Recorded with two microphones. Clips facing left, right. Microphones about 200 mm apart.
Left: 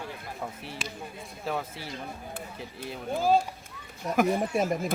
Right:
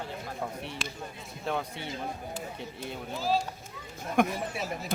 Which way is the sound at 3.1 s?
50° left (ahead or behind).